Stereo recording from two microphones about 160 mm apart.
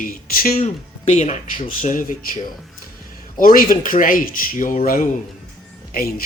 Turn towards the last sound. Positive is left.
turn(degrees=70)  # may be behind; listen again after turning